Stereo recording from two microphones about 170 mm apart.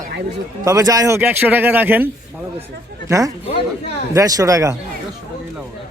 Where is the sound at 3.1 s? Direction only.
20° right (ahead or behind).